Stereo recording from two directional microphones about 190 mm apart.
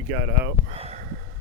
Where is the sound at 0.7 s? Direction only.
30° right (ahead or behind).